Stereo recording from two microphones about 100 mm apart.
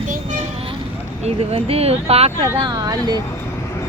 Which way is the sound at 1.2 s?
85° right.